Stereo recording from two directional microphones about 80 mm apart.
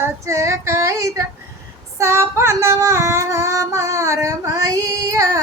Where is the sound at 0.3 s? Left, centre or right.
Right.